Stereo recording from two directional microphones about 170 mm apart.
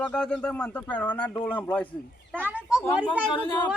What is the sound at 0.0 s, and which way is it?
Speech, 5° left (ahead or behind).